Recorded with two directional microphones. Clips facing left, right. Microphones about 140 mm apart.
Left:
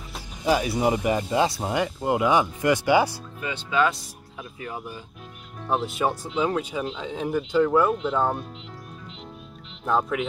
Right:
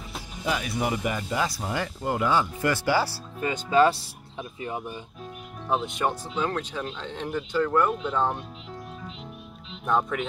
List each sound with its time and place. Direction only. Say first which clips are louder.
0.5 s speech: left 6 dB; 30° left (ahead or behind)
3.3 s speech: right 4 dB; 45° right (ahead or behind); by 5.0 s 20° right (ahead or behind)
5.7 s speech: left 2 dB; 5° left (ahead or behind)
9.8 s speech: left 1 dB; 5° left (ahead or behind)